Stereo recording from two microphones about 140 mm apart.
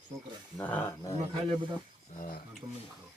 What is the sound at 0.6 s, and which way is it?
Speech, 10° left (ahead or behind).